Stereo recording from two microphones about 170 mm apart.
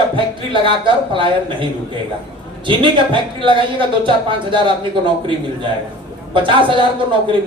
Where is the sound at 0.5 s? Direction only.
30° right (ahead or behind).